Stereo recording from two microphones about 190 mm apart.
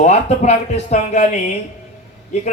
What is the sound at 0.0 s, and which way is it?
A man's voice, 35° left (ahead or behind).